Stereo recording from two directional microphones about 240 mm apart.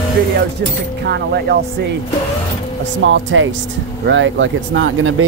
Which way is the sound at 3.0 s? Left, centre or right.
Right.